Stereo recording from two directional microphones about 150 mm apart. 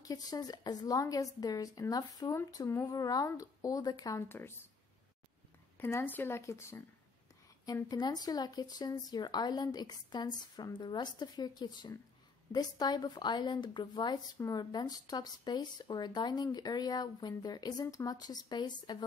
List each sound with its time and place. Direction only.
0.0 s a woman's voice: 25° left (ahead or behind)
5.8 s a woman's voice: 15° left (ahead or behind)